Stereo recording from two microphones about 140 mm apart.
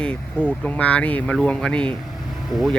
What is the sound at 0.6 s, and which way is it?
Speech, 10° left (ahead or behind).